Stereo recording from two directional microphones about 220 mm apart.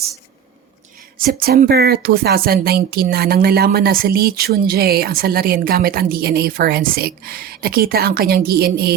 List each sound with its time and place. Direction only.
1.2 s speech: 40° right (ahead or behind)